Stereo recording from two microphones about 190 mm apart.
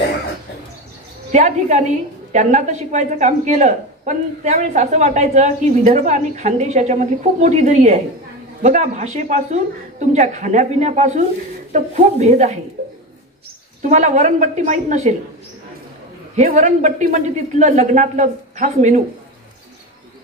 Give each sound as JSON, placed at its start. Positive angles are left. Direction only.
{"t": 1.3, "sound": "speech", "side_deg": -40}
{"t": 12.8, "sound": "a sound", "side_deg": -45}
{"t": 13.8, "sound": "speech", "side_deg": -40}
{"t": 16.3, "sound": "speech", "side_deg": -40}